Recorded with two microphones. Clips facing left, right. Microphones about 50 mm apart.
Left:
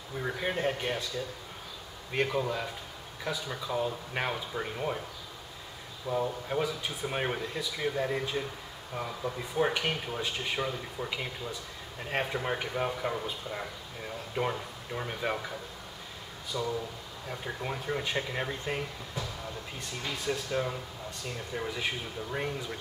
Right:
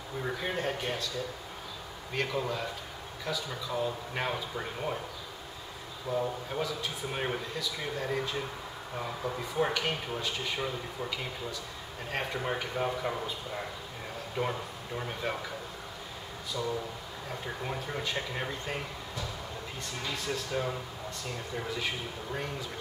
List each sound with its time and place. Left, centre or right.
0.2 s speech: centre
2.2 s speech: centre
6.0 s speech: centre
8.9 s speech: centre
9.6 s speech: centre
12.1 s speech: centre
16.5 s speech: centre
20.2 s speech: centre